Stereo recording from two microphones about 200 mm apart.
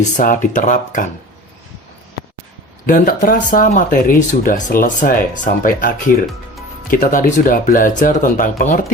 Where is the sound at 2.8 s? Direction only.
45° left (ahead or behind).